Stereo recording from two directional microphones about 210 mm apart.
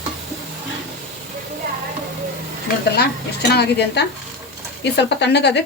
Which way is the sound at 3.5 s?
50° left (ahead or behind).